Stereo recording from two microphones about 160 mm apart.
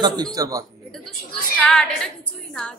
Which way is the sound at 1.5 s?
5° left (ahead or behind).